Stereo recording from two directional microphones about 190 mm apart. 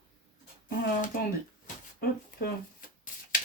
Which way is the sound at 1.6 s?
55° left (ahead or behind).